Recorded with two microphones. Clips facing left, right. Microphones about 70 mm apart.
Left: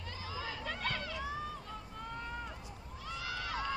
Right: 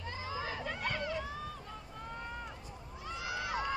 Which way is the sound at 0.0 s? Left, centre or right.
Right.